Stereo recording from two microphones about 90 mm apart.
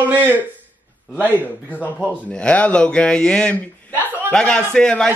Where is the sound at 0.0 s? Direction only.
20° right (ahead or behind).